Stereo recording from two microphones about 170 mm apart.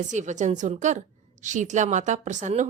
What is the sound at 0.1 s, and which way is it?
A woman's voice, 45° right (ahead or behind).